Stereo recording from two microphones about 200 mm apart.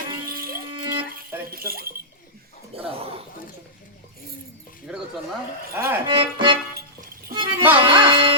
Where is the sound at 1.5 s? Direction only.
50° right (ahead or behind).